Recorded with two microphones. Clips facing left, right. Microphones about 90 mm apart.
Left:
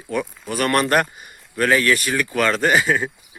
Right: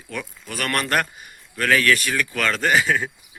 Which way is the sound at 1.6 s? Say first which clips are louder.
Left 2 dB; 15° left (ahead or behind).